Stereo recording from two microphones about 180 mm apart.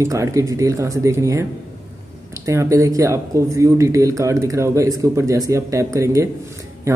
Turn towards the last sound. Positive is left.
turn(degrees=-15)  # may be behind; listen again after turning